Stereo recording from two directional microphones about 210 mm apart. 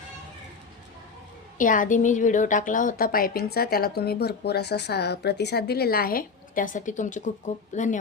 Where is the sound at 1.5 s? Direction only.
40° left (ahead or behind).